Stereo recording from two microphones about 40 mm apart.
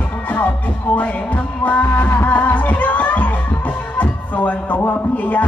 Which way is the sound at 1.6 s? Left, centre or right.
Left.